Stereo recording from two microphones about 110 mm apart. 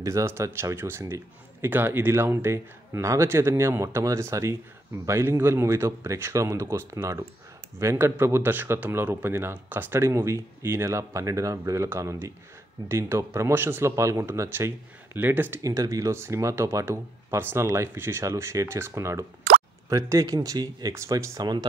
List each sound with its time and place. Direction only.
0.0 s speech: 25° right (ahead or behind)
15.6 s speech: 30° right (ahead or behind)